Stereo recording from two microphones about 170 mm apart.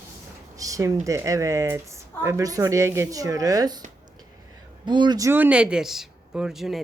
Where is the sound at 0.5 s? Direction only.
20° right (ahead or behind).